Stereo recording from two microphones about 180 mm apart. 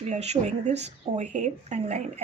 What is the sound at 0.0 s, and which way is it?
A woman's voice, 40° right (ahead or behind).